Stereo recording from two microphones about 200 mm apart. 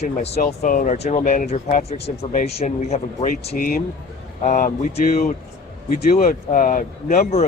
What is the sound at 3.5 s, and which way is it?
Speech, 50° left (ahead or behind).